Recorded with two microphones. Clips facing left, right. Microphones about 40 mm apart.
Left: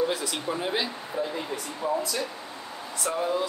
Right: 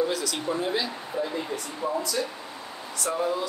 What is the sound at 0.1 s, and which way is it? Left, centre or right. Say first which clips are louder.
Speech: right 1 dB; left.